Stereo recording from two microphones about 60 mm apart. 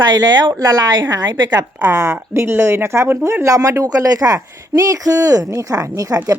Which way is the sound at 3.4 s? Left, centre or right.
Right.